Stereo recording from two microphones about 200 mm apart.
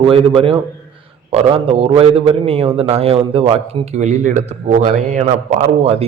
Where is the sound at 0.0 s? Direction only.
25° right (ahead or behind).